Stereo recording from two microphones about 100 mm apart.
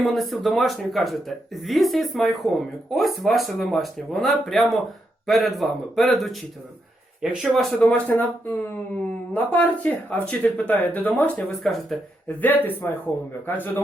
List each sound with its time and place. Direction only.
0.0 s speech: centre (ahead or behind)
7.5 s speech: 5° left (ahead or behind)
11.6 s speech: centre (ahead or behind)
12.4 s speech: 20° left (ahead or behind)